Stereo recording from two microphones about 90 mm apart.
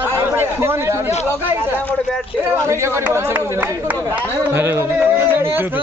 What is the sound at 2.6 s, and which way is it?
Speech, 30° right (ahead or behind).